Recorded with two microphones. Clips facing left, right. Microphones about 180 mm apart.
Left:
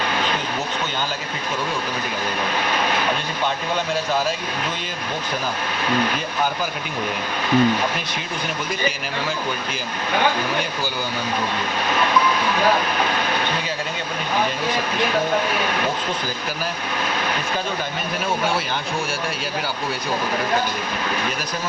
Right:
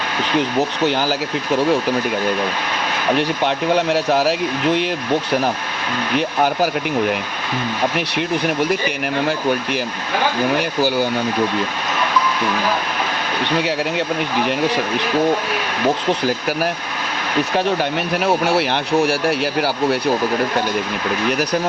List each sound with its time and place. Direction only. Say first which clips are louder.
0.9 s speech: right 8 dB; 80° right
3.2 s speech: right 6 dB; 70° right (ahead or behind)
6.1 s speech: right 7 dB; 70° right (ahead or behind)
18.2 s speech: right 6 dB; 70° right (ahead or behind)